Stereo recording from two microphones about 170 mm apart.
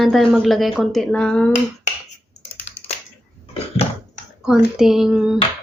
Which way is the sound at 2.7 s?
40° left (ahead or behind).